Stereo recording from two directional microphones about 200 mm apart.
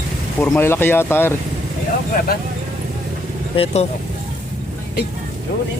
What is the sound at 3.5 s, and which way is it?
Speech, 30° left (ahead or behind).